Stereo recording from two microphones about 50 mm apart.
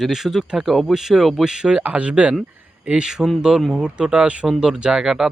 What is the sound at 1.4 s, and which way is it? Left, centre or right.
Speech, centre.